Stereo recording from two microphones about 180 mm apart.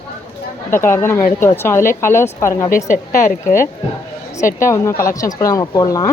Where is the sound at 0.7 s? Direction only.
15° left (ahead or behind).